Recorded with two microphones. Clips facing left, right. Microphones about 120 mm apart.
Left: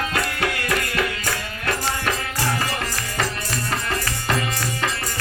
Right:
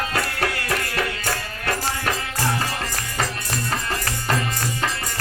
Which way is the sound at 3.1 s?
35° right (ahead or behind).